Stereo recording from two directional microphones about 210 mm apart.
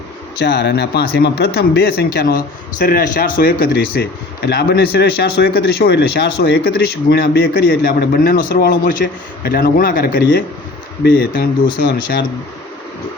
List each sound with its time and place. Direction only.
0.3 s speech: 50° left (ahead or behind)